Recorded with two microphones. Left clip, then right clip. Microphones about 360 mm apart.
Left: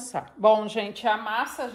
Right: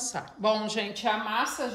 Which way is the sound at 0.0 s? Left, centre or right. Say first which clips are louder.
Left 7 dB; centre.